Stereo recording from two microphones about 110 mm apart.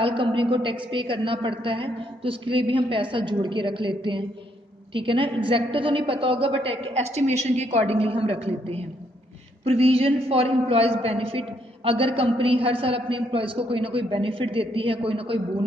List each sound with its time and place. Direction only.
0.0 s a woman's voice: 50° right (ahead or behind)